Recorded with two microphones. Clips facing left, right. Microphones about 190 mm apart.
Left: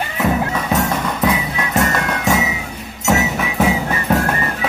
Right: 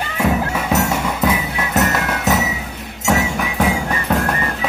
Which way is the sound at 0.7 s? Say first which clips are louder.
Right 1 dB; 10° right (ahead or behind).